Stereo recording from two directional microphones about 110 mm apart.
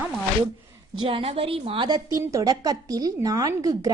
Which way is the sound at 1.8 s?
40° right (ahead or behind).